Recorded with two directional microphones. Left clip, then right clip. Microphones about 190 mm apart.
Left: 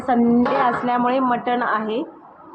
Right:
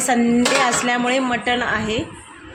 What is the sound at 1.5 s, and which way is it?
Speech, 45° right (ahead or behind).